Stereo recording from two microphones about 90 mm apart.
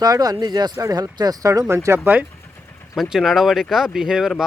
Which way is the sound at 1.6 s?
30° right (ahead or behind).